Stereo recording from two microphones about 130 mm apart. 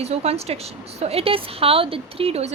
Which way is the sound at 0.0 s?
50° right (ahead or behind).